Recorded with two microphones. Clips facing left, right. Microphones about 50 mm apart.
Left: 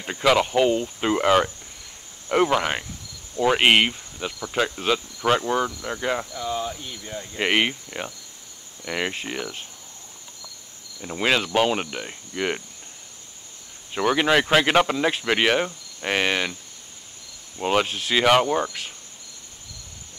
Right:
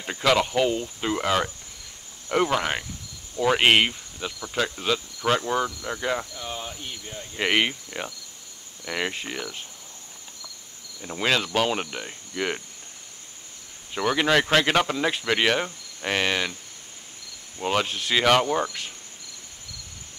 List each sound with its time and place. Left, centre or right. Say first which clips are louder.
0.0 s cricket: left 2 dB; centre
2.3 s cricket: left 3 dB; centre
7.3 s cricket: left 1 dB; centre
11.0 s cricket: left 2 dB; centre
13.9 s cricket: left 2 dB; centre
17.6 s cricket: left 3 dB; centre
17.8 s speech: left 1 dB; left
18.1 s cricket: left 2 dB; centre